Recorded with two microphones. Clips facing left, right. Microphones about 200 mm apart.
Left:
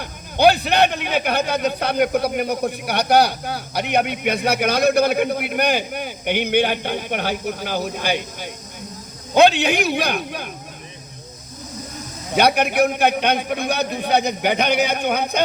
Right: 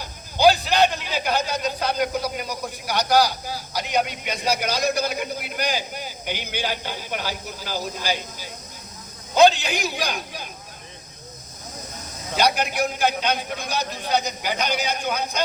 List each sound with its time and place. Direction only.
0.0 s speech: 60° left (ahead or behind)
12.4 s speech: 60° left (ahead or behind)